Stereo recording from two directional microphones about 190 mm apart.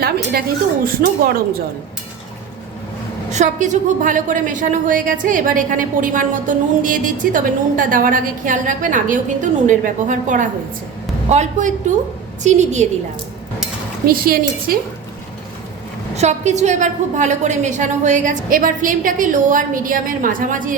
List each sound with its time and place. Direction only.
1.0 s a woman's voice: 50° right (ahead or behind)
3.2 s a woman's voice: 40° right (ahead or behind)
14.1 s a woman's voice: 50° right (ahead or behind)
16.1 s a woman's voice: 35° right (ahead or behind)